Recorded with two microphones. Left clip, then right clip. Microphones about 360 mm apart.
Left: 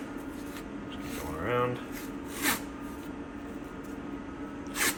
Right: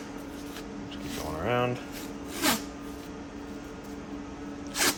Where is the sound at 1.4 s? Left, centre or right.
Right.